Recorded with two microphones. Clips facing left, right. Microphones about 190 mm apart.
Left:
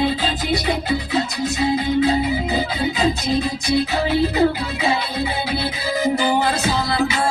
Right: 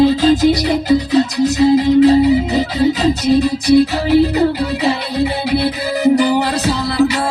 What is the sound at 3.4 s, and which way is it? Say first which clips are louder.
Music: right 9 dB; 70° right (ahead or behind).